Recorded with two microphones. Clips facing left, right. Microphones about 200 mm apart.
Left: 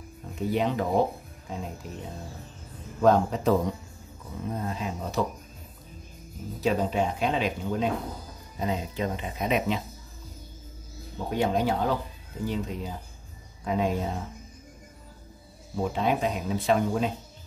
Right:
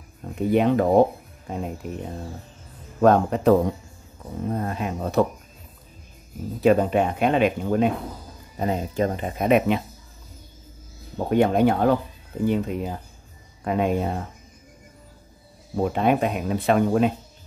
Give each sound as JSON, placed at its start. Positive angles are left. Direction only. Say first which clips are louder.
{"t": 0.4, "sound": "speech", "louder": "right 7 dB", "side_deg": -55}
{"t": 3.0, "sound": "speech", "louder": "right 4 dB", "side_deg": -60}
{"t": 6.6, "sound": "speech", "louder": "right 7 dB", "side_deg": -60}
{"t": 11.2, "sound": "speech", "louder": "right 7 dB", "side_deg": -60}
{"t": 15.7, "sound": "speech", "louder": "right 5 dB", "side_deg": -55}